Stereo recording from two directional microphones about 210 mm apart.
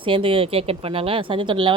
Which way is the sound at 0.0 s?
25° right (ahead or behind).